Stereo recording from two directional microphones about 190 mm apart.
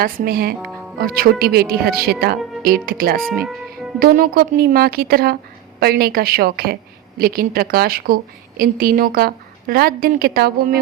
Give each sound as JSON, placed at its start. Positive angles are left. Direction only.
{"t": 0.0, "sound": "a woman's voice", "side_deg": -50}